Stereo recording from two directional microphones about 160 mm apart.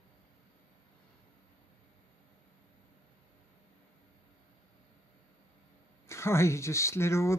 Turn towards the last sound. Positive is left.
turn(degrees=15)  # may be behind; listen again after turning